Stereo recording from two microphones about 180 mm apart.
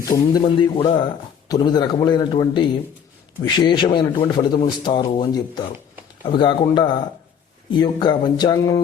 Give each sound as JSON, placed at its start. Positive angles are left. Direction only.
{"t": 0.1, "sound": "a man's voice", "side_deg": 25}